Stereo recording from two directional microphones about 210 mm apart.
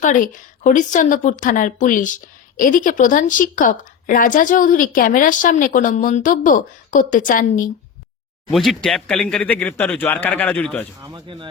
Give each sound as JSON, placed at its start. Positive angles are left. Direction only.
{"t": 0.0, "sound": "speech", "side_deg": 35}
{"t": 8.4, "sound": "speech", "side_deg": 0}
{"t": 11.0, "sound": "speech", "side_deg": -20}